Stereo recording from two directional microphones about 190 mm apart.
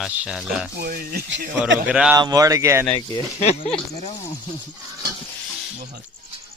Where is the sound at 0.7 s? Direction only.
55° right (ahead or behind).